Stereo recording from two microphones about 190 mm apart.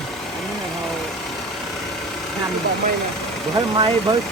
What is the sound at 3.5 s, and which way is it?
Speech, 20° right (ahead or behind).